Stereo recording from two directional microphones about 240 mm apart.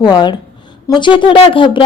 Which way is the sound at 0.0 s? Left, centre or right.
Centre.